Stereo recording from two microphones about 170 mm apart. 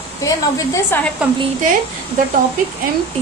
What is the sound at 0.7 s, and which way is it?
Speech, 15° left (ahead or behind).